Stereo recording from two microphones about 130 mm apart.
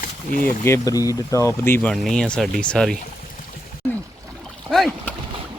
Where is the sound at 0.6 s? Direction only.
25° left (ahead or behind).